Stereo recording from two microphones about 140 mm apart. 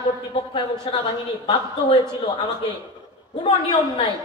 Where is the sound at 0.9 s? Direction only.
40° left (ahead or behind).